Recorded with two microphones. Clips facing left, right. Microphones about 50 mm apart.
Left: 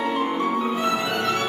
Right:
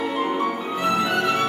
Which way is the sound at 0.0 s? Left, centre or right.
Centre.